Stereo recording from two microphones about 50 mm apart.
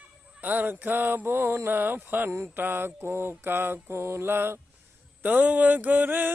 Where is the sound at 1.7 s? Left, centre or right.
Right.